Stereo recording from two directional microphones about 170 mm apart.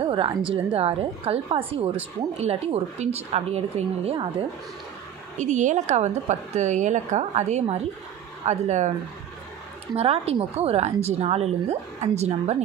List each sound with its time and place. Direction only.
0.1 s a woman's voice: 30° right (ahead or behind)
5.4 s a woman's voice: 45° right (ahead or behind)
9.9 s a woman's voice: 35° right (ahead or behind)